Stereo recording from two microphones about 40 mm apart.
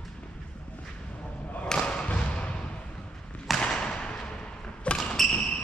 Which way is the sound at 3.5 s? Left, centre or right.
Left.